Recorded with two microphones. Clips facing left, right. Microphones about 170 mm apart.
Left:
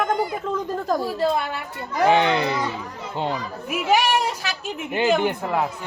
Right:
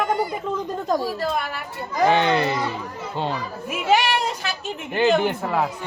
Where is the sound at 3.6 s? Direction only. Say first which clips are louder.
Even; centre (ahead or behind).